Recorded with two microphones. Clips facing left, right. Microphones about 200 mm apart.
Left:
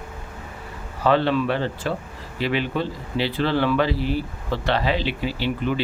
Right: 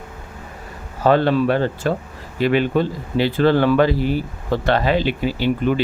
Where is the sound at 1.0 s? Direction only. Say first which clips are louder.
Right 4 dB; 45° right (ahead or behind).